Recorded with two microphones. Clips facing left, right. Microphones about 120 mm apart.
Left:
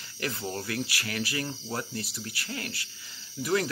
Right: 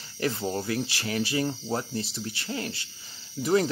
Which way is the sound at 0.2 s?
25° right (ahead or behind).